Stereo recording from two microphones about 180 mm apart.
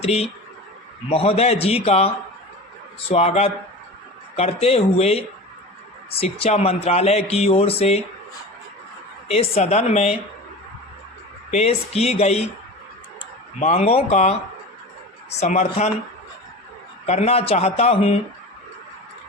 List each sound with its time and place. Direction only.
0.0 s speech: 35° left (ahead or behind)
9.3 s speech: 35° left (ahead or behind)
11.5 s speech: 35° left (ahead or behind)
13.6 s speech: 40° left (ahead or behind)
17.1 s speech: 35° left (ahead or behind)